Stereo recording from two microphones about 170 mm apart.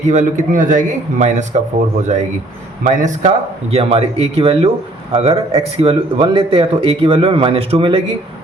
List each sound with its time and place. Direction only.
0.1 s a man's voice: 45° right (ahead or behind)